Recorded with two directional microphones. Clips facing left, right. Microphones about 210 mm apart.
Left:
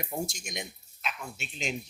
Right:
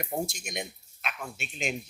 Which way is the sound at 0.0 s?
60° right (ahead or behind).